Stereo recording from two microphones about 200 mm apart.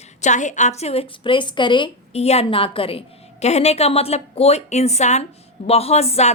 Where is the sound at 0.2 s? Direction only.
35° left (ahead or behind).